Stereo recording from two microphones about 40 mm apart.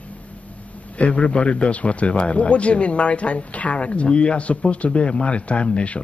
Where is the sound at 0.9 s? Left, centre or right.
Left.